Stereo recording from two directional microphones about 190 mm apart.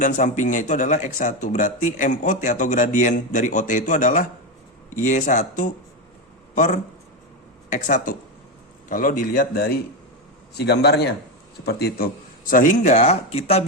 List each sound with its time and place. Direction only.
0.0 s speech: 40° left (ahead or behind)
10.6 s speech: 60° left (ahead or behind); by 13.7 s 35° left (ahead or behind)